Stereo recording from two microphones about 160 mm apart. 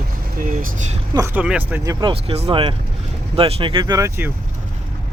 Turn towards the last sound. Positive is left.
turn(degrees=-15)  # may be behind; listen again after turning